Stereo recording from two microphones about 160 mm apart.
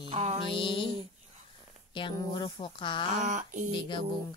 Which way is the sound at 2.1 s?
25° left (ahead or behind).